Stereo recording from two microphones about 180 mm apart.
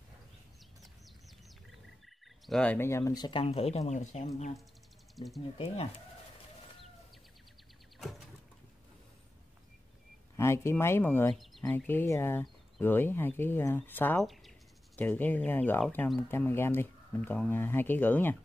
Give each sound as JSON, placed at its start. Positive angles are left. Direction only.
{"t": 2.4, "sound": "speech", "side_deg": 5}
{"t": 5.1, "sound": "speech", "side_deg": 0}
{"t": 10.3, "sound": "speech", "side_deg": 15}
{"t": 14.2, "sound": "speech", "side_deg": 0}